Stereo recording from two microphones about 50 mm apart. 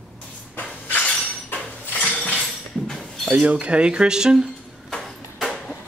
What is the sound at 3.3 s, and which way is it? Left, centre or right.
Speech, right.